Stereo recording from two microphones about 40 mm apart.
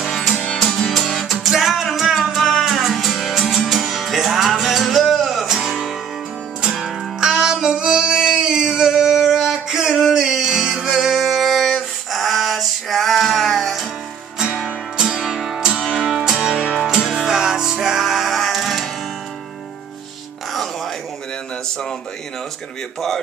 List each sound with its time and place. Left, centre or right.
0.7 s music: centre
8.7 s a sound: centre
10.1 s music: centre
11.2 s music: centre
14.5 s music: centre
15.6 s music: centre